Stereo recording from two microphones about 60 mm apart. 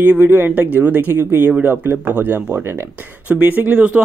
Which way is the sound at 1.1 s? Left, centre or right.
Right.